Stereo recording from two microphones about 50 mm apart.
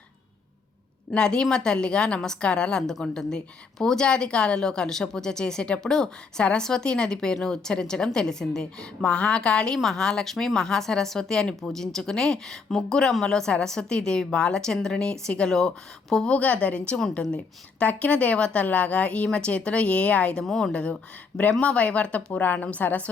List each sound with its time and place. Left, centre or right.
1.1 s speech: centre
9.7 s speech: centre
16.2 s a woman's voice: left
17.8 s a woman's voice: left
20.4 s speech: centre
21.6 s a woman's voice: left